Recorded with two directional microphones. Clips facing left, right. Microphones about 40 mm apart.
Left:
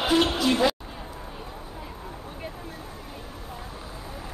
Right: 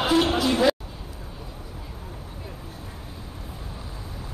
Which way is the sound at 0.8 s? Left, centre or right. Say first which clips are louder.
Left 2 dB; left.